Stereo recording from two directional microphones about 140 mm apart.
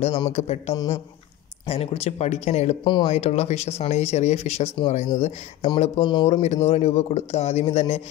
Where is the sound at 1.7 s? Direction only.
50° left (ahead or behind).